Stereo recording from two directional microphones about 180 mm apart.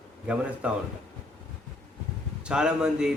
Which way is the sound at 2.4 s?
5° right (ahead or behind).